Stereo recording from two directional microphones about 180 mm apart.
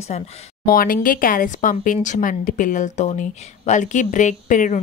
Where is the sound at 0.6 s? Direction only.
55° left (ahead or behind).